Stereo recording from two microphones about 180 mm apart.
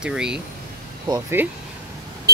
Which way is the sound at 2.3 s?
60° right (ahead or behind).